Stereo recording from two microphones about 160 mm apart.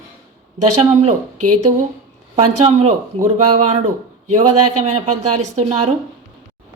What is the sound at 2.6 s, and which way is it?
Speech, 40° right (ahead or behind).